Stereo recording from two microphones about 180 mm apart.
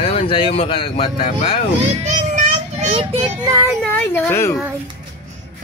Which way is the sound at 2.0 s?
40° right (ahead or behind).